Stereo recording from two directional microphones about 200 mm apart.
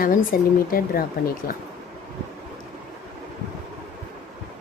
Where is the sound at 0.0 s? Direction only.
45° left (ahead or behind).